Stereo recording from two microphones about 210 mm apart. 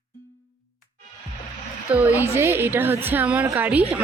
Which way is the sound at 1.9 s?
10° right (ahead or behind).